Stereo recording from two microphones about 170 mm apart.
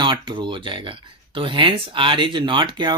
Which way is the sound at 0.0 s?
25° right (ahead or behind).